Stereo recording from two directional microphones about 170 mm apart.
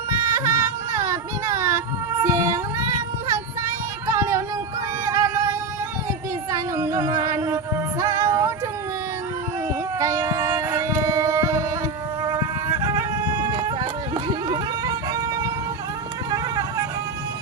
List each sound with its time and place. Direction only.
0.3 s a sound: 20° right (ahead or behind)
2.2 s child singing: 20° right (ahead or behind)
4.0 s music: 20° right (ahead or behind)
6.5 s female singing: 20° right (ahead or behind)
10.0 s a sound: 20° right (ahead or behind)
12.8 s music: 25° right (ahead or behind)
16.3 s music: 20° right (ahead or behind)